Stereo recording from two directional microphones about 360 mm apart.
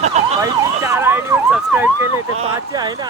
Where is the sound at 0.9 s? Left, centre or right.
Centre.